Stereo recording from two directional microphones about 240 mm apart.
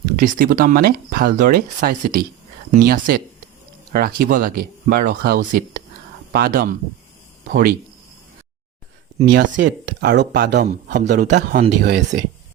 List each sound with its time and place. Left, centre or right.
0.2 s speech: right
9.3 s speech: right